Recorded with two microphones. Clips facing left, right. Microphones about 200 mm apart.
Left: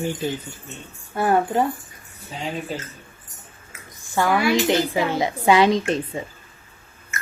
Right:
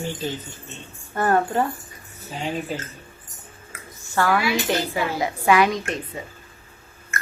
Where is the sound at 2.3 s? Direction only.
Centre (ahead or behind).